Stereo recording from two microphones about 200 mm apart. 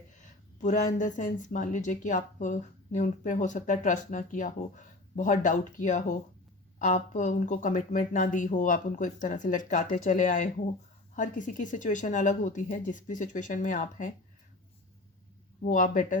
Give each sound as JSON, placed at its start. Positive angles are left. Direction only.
{"t": 0.2, "sound": "a sound", "side_deg": 40}
{"t": 0.9, "sound": "speech", "side_deg": 40}
{"t": 15.6, "sound": "speech", "side_deg": 40}